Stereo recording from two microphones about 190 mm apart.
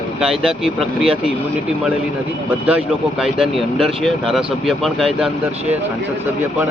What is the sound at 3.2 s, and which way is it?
Speech, centre (ahead or behind).